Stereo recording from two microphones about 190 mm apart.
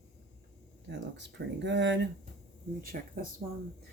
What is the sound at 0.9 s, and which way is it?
Speech, 70° right (ahead or behind).